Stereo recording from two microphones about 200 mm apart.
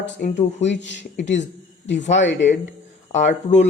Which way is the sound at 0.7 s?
60° left (ahead or behind).